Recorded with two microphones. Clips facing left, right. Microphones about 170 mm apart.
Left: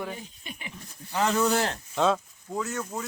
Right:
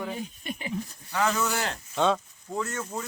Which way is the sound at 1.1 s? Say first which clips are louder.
Left 3 dB; 30° left (ahead or behind).